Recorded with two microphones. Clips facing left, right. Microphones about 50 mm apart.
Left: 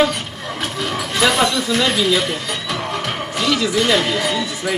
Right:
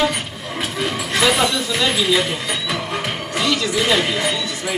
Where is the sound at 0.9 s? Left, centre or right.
Centre.